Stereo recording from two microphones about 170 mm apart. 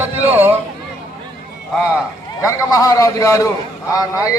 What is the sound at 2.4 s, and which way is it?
A man's voice, 20° left (ahead or behind).